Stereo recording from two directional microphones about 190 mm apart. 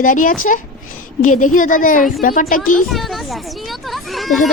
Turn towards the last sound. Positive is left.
turn(degrees=0)  # may be behind; listen again after turning